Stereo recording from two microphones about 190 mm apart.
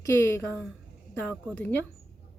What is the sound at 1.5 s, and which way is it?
Speech, 10° left (ahead or behind).